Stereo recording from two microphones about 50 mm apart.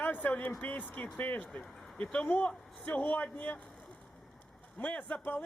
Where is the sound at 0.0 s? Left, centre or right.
Left.